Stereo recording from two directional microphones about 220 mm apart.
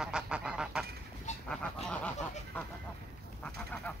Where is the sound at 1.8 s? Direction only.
5° left (ahead or behind).